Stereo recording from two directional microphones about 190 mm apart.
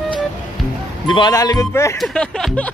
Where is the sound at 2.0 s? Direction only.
Centre (ahead or behind).